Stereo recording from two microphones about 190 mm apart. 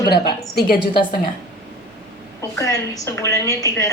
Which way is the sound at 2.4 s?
15° left (ahead or behind).